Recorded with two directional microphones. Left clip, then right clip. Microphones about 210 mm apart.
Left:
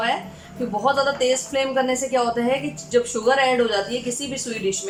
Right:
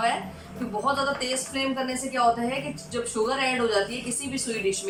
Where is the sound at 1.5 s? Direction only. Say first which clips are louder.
Left 7 dB; 35° left (ahead or behind).